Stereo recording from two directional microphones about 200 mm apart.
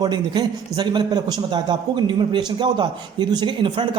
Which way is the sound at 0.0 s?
20° right (ahead or behind).